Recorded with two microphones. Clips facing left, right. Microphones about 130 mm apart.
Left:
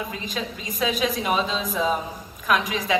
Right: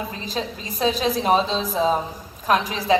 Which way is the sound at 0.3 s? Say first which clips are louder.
Right 2 dB; 35° right (ahead or behind).